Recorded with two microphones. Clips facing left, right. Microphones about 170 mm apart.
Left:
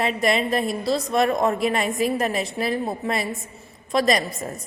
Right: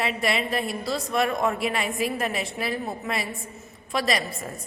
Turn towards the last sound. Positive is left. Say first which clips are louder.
# left 5 dB
turn(degrees=40)  # may be behind; listen again after turning